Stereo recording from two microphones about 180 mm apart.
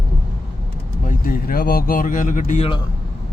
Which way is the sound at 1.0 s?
50° left (ahead or behind).